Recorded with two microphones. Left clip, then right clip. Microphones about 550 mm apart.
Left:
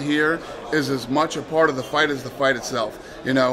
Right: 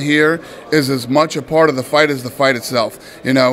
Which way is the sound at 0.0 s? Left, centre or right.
Right.